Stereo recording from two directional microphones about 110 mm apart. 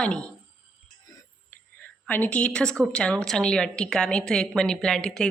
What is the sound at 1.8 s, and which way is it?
A woman's voice, 15° left (ahead or behind).